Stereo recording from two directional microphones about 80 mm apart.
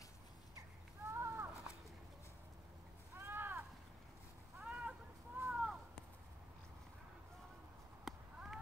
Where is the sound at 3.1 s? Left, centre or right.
Right.